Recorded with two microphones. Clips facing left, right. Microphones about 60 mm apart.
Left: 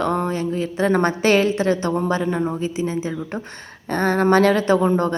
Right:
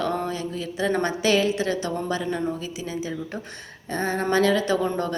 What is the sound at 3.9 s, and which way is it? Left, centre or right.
A woman's voice, left.